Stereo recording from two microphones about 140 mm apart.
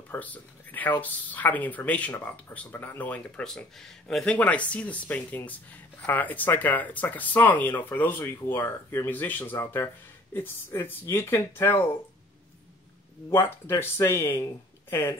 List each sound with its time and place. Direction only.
0.1 s speech: 10° left (ahead or behind)
13.3 s speech: 20° left (ahead or behind)